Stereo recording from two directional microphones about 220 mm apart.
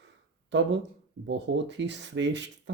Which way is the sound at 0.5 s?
55° right (ahead or behind).